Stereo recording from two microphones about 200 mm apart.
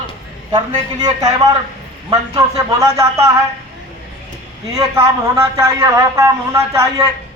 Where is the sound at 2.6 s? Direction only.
15° right (ahead or behind).